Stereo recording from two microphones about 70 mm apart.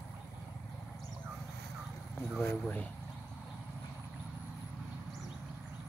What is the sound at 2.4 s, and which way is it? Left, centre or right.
Speech, left.